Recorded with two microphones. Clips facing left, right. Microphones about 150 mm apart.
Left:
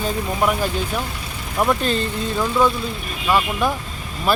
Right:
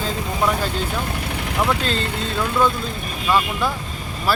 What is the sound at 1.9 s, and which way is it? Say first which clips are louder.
Speech: left 1 dB; 90° right.